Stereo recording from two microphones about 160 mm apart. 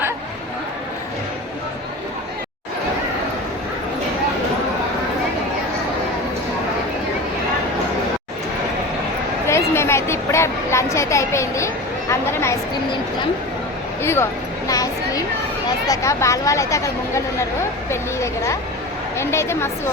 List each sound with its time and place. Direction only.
9.5 s a sound: 15° left (ahead or behind)
14.0 s a woman's voice: 15° left (ahead or behind)
19.1 s a woman's voice: 15° left (ahead or behind)